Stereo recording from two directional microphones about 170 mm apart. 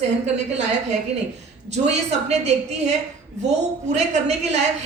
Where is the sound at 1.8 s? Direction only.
40° right (ahead or behind).